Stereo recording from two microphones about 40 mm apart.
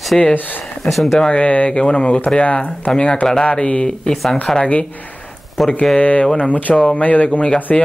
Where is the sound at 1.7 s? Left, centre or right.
Left.